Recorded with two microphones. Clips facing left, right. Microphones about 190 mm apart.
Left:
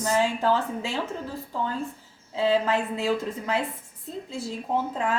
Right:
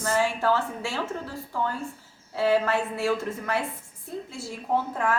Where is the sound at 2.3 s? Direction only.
20° left (ahead or behind).